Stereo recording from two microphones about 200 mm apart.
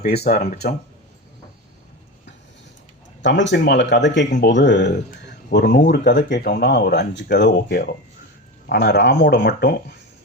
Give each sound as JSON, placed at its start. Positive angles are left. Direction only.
{"t": 0.0, "sound": "speech", "side_deg": 55}
{"t": 3.2, "sound": "speech", "side_deg": 65}